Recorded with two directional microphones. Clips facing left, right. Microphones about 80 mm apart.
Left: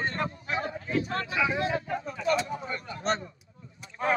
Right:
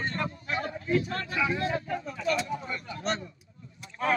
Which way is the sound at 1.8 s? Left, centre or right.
Left.